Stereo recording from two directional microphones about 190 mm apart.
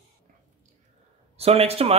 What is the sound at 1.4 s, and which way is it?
Speech, 30° right (ahead or behind).